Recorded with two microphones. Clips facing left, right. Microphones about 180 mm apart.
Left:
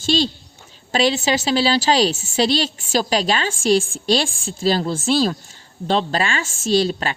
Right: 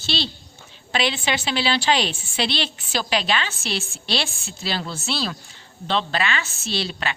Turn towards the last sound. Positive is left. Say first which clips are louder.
# left 9 dB
turn(degrees=40)  # may be behind; listen again after turning